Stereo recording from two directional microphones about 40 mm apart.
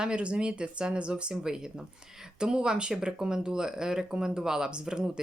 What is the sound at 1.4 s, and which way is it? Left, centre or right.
Speech, centre.